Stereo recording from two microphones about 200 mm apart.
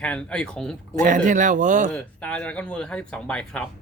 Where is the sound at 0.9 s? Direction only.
40° right (ahead or behind).